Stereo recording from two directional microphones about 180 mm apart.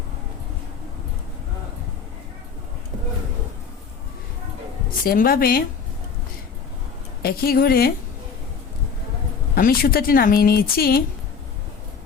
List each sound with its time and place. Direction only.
5.0 s speech: 55° left (ahead or behind)
7.2 s speech: 55° left (ahead or behind)
9.6 s speech: 55° left (ahead or behind)